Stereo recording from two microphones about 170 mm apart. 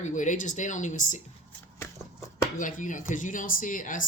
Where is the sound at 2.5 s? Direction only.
50° left (ahead or behind).